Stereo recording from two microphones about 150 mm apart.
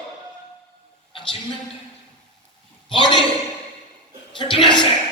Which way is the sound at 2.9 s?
30° left (ahead or behind).